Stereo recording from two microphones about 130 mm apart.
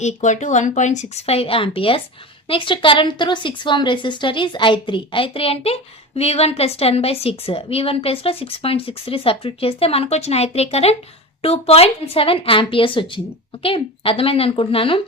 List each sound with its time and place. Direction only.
0.0 s a woman's voice: 65° left (ahead or behind); by 15.0 s 45° left (ahead or behind)